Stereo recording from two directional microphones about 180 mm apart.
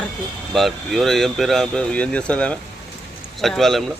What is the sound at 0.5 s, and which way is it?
Speech, centre (ahead or behind).